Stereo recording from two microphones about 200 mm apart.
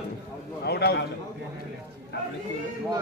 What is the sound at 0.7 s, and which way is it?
Speech, 55° left (ahead or behind).